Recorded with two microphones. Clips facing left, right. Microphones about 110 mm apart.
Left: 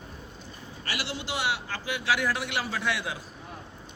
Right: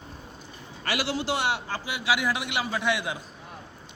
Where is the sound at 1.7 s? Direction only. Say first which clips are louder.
Right 1 dB; 15° right (ahead or behind).